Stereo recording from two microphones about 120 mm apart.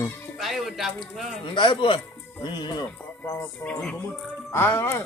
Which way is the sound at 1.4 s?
45° left (ahead or behind).